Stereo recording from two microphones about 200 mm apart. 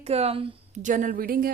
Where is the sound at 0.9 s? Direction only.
45° right (ahead or behind).